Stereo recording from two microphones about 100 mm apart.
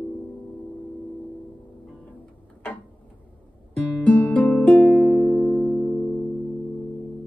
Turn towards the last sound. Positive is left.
turn(degrees=15)  # may be behind; listen again after turning